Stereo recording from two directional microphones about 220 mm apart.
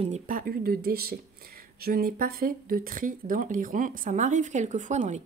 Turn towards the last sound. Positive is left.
turn(degrees=-35)  # may be behind; listen again after turning